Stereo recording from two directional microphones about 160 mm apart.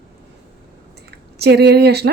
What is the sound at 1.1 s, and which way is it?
Speech, 90° right.